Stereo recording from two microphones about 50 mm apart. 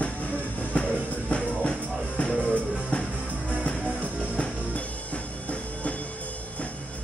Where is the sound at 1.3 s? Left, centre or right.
Left.